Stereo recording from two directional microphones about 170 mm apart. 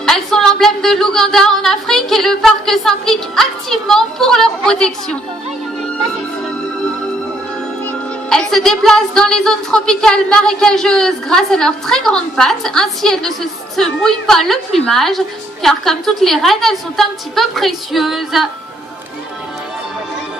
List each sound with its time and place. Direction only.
0.0 s speech: 5° left (ahead or behind)
7.9 s speech: 5° left (ahead or behind)